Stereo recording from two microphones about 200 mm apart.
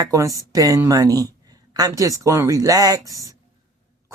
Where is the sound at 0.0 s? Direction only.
15° right (ahead or behind).